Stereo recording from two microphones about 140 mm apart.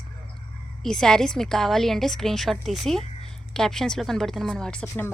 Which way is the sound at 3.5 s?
5° left (ahead or behind).